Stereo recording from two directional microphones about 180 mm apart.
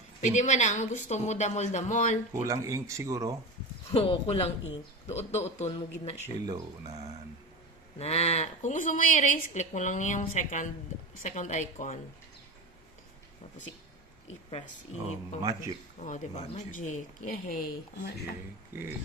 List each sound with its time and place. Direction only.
0.2 s a woman's voice: 40° left (ahead or behind)
2.4 s speech: 15° right (ahead or behind)
3.9 s a woman's voice: 30° left (ahead or behind)
6.2 s speech: 20° right (ahead or behind)
7.9 s a woman's voice: 35° left (ahead or behind)
15.4 s speech: 20° right (ahead or behind)
16.0 s a woman's voice: 40° left (ahead or behind)